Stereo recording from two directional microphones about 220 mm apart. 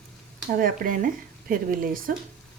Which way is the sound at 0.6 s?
40° right (ahead or behind).